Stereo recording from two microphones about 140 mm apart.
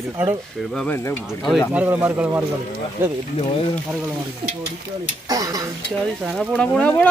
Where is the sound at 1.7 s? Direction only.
10° right (ahead or behind).